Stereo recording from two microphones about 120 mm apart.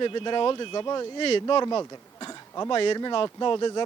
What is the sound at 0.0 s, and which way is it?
Speech, 40° left (ahead or behind).